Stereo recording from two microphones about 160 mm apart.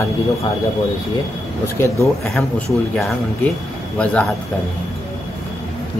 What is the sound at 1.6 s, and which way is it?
Speech, 15° left (ahead or behind).